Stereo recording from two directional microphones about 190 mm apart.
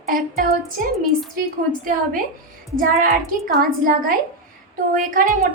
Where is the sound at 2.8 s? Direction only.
50° right (ahead or behind).